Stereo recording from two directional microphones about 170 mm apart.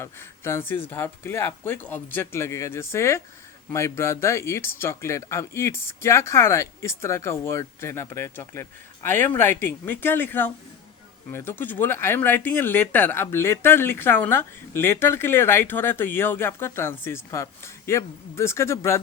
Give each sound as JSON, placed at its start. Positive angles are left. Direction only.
{"t": 0.0, "sound": "speech", "side_deg": 15}